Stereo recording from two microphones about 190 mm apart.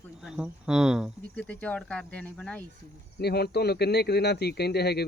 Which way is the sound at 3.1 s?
55° left (ahead or behind).